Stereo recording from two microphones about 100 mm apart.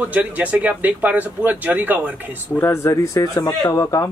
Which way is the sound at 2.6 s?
30° left (ahead or behind).